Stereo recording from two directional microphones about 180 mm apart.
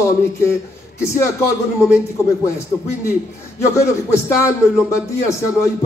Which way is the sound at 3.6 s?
15° left (ahead or behind).